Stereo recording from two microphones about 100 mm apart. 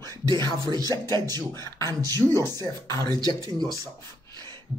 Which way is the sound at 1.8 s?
40° right (ahead or behind).